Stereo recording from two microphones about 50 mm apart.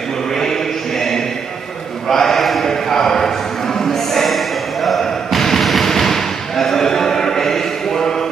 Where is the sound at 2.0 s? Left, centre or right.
Centre.